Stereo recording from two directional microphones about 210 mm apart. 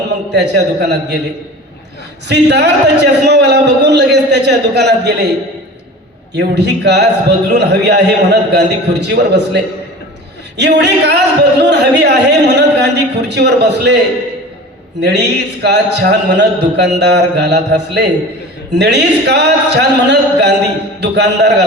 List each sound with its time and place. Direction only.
0.3 s a man's voice: 55° right (ahead or behind)
2.2 s speech: 55° right (ahead or behind)
6.3 s speech: 55° right (ahead or behind)
10.6 s speech: 55° right (ahead or behind)
15.0 s a man's voice: 55° right (ahead or behind)